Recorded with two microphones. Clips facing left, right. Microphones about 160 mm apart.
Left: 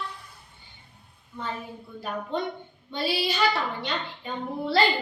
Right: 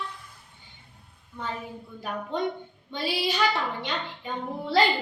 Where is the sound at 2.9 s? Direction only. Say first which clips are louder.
Left 1 dB; 15° right (ahead or behind).